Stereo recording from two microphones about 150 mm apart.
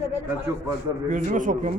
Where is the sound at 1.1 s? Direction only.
60° right (ahead or behind).